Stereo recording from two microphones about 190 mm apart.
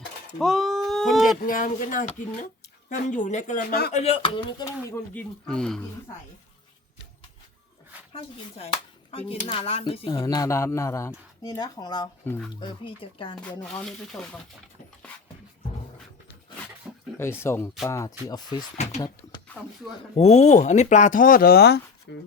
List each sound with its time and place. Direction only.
0.3 s a sound: centre (ahead or behind)
1.4 s speech: 45° left (ahead or behind)
3.9 s speech: 30° left (ahead or behind)
4.6 s speech: 15° left (ahead or behind)
8.1 s speech: 30° left (ahead or behind)
12.2 s speech: 10° left (ahead or behind)
12.5 s speech: 25° left (ahead or behind)
13.4 s speech: 5° left (ahead or behind)
17.2 s speech: 10° left (ahead or behind)
18.8 s speech: 35° left (ahead or behind)
20.1 s speech: 35° left (ahead or behind); by 22.2 s 65° left (ahead or behind)